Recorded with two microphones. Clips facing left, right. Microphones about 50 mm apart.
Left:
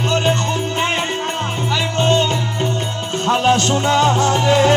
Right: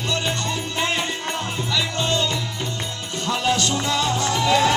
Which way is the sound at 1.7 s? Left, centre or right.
Left.